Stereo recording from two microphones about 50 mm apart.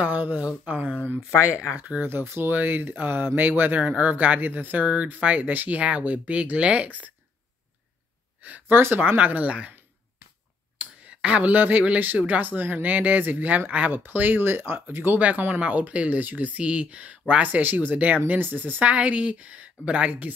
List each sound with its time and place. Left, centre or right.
0.0 s speech: right
2.0 s speech: right
8.4 s a sound: right
8.7 s speech: right
9.0 s speech: right
10.8 s a sound: right
12.2 s speech: right
15.1 s speech: right
18.8 s speech: right